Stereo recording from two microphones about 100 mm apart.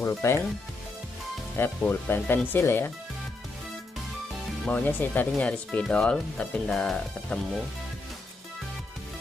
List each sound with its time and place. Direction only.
0.0 s speech: 25° left (ahead or behind)
1.6 s speech: 20° left (ahead or behind)
4.6 s speech: 15° left (ahead or behind)